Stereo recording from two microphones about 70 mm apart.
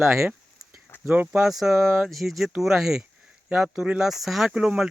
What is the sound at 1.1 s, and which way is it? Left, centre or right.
Speech, right.